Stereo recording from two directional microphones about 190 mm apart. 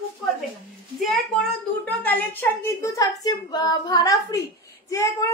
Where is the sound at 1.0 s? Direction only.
Centre (ahead or behind).